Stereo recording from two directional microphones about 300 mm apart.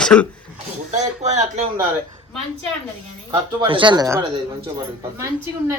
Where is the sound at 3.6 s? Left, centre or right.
Centre.